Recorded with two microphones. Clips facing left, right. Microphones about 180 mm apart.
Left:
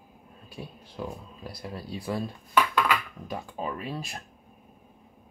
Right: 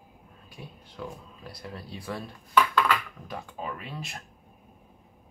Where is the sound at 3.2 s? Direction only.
25° left (ahead or behind).